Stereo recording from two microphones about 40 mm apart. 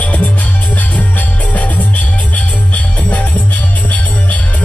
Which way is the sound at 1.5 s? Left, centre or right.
Left.